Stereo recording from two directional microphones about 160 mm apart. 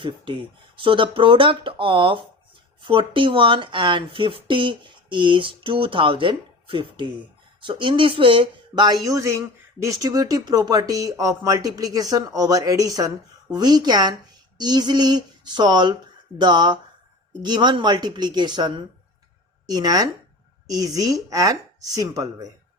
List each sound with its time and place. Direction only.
0.0 s speech: 30° right (ahead or behind)